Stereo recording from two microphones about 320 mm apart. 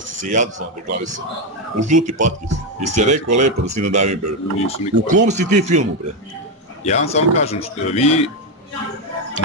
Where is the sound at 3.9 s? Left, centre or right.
Right.